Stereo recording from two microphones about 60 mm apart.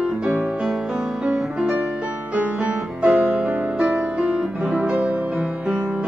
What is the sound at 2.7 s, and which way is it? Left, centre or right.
Music, centre.